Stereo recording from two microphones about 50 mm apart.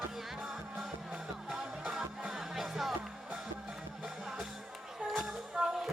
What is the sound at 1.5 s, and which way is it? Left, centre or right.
Music, centre.